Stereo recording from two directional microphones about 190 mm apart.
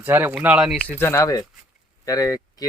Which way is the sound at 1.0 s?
15° left (ahead or behind).